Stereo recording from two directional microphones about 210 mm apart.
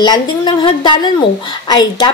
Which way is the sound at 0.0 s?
20° left (ahead or behind).